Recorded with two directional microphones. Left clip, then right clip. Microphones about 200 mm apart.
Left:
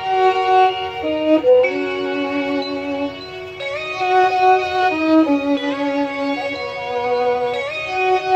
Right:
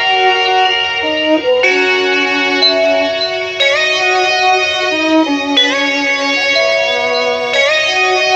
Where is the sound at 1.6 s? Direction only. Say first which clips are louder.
Right 7 dB; 45° right (ahead or behind).